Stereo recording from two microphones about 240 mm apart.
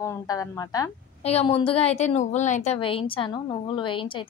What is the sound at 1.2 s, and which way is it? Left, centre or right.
A woman's voice, left.